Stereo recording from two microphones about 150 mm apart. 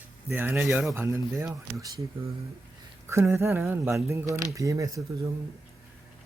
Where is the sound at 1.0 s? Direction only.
15° right (ahead or behind).